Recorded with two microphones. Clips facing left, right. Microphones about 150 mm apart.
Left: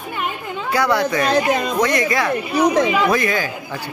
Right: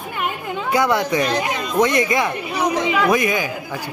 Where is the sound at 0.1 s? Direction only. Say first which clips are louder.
Right 1 dB; 15° right (ahead or behind).